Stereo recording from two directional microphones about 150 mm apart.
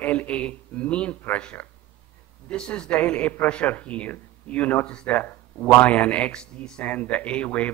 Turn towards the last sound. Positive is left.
turn(degrees=10)  # may be behind; listen again after turning